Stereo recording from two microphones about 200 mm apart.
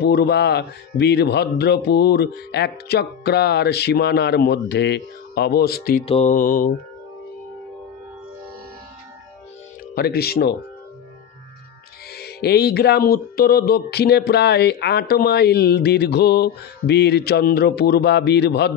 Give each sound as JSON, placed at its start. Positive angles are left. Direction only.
{"t": 0.0, "sound": "speech", "side_deg": 55}
{"t": 6.0, "sound": "mantra", "side_deg": 35}
{"t": 9.9, "sound": "speech", "side_deg": 50}
{"t": 12.1, "sound": "speech", "side_deg": 55}